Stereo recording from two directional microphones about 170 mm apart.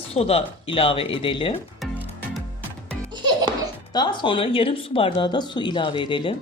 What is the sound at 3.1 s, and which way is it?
Music, 25° right (ahead or behind).